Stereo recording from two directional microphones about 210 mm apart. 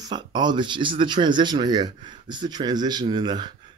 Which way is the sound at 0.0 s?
20° right (ahead or behind).